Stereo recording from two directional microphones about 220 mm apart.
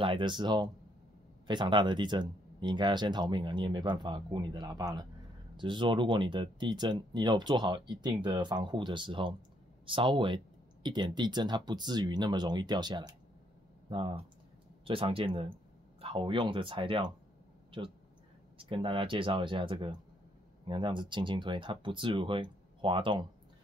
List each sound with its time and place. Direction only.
0.0 s speech: 20° right (ahead or behind)
17.6 s a sound: 20° right (ahead or behind)
18.6 s speech: 25° right (ahead or behind)